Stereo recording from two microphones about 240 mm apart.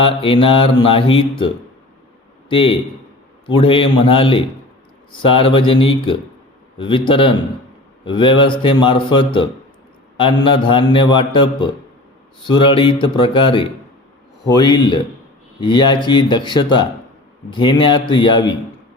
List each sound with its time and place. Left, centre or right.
0.0 s a man's voice: left
2.5 s a man's voice: left